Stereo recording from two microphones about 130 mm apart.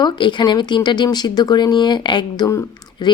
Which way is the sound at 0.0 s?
35° left (ahead or behind).